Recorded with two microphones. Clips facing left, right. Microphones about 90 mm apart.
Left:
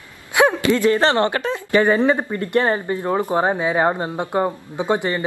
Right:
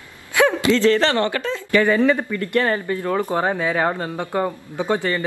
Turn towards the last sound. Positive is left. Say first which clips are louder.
# left 1 dB
turn(degrees=20)  # may be behind; listen again after turning